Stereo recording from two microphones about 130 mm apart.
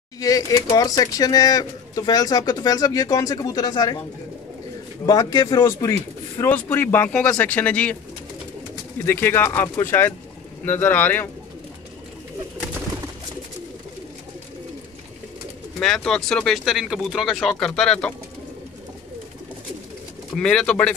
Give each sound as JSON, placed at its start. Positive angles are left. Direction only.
{"t": 0.2, "sound": "speech", "side_deg": 30}
{"t": 5.0, "sound": "speech", "side_deg": 30}
{"t": 9.0, "sound": "speech", "side_deg": 15}
{"t": 15.8, "sound": "speech", "side_deg": 5}
{"t": 20.3, "sound": "speech", "side_deg": 5}